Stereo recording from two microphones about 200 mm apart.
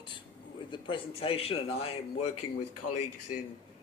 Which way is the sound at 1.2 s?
30° left (ahead or behind).